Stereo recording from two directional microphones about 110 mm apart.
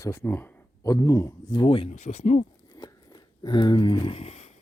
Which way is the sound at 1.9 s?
90° left.